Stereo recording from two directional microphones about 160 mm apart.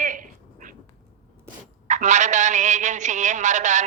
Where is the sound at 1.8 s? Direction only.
50° right (ahead or behind).